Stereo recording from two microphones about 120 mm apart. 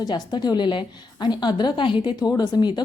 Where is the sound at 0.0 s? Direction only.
35° left (ahead or behind).